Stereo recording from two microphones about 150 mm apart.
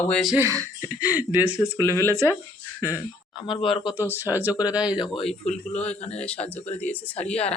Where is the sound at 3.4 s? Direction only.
35° left (ahead or behind).